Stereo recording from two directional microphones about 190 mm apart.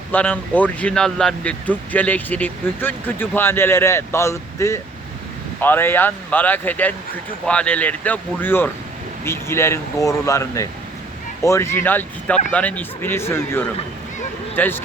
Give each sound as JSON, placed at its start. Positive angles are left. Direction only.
{"t": 0.1, "sound": "speech", "side_deg": 10}